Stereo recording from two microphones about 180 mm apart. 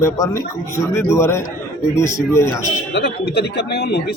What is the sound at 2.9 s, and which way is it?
Speech, 65° left (ahead or behind).